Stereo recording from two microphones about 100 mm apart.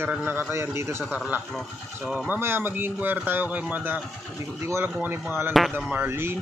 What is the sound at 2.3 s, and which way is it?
A man's voice, 20° right (ahead or behind).